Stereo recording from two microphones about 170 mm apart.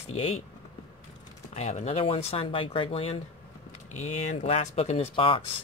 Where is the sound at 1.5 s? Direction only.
40° left (ahead or behind).